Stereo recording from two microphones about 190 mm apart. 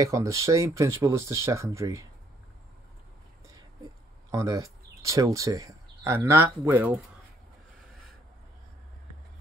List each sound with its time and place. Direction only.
0.0 s speech: 15° right (ahead or behind)
4.3 s speech: 15° right (ahead or behind)
7.8 s vehicle: centre (ahead or behind)